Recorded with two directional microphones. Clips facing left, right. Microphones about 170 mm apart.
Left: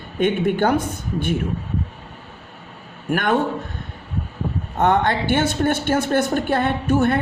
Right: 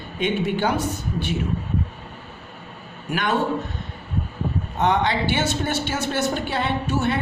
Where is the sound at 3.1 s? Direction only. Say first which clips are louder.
Left 4 dB; 55° left (ahead or behind).